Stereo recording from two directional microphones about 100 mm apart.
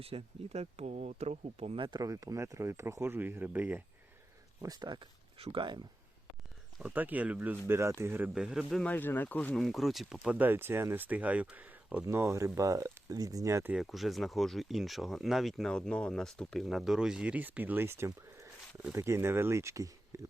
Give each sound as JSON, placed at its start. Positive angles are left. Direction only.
{"t": 0.0, "sound": "speech", "side_deg": -75}
{"t": 2.0, "sound": "speech", "side_deg": -35}
{"t": 4.6, "sound": "speech", "side_deg": -40}
{"t": 5.4, "sound": "speech", "side_deg": -60}
{"t": 6.8, "sound": "speech", "side_deg": -15}
{"t": 7.7, "sound": "speech", "side_deg": -30}
{"t": 8.2, "sound": "speech", "side_deg": -10}
{"t": 8.8, "sound": "speech", "side_deg": 15}
{"t": 9.6, "sound": "speech", "side_deg": 0}
{"t": 10.2, "sound": "speech", "side_deg": -15}
{"t": 12.0, "sound": "speech", "side_deg": -30}
{"t": 13.7, "sound": "speech", "side_deg": 0}